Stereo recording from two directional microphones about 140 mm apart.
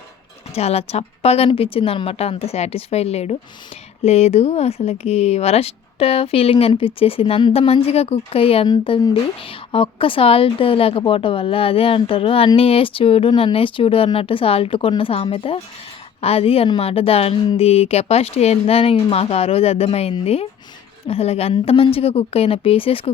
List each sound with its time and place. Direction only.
0.5 s speech: 45° left (ahead or behind)
8.6 s speech: 35° left (ahead or behind)